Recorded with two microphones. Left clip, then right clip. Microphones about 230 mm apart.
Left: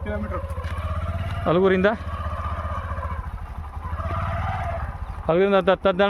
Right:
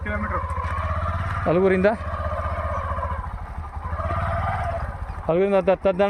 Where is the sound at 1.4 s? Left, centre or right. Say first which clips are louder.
Even; centre.